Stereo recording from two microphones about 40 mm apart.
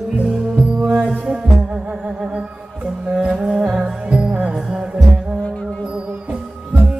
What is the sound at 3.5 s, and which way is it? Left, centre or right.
Music, centre.